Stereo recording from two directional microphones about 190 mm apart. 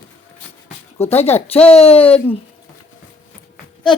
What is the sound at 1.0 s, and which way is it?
Speech, 35° left (ahead or behind).